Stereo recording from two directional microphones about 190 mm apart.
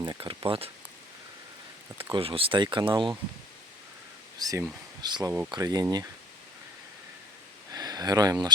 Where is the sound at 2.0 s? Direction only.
30° right (ahead or behind).